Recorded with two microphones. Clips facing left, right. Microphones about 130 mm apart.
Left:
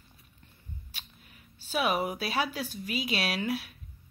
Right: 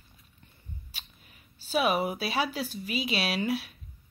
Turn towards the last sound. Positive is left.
turn(degrees=0)  # may be behind; listen again after turning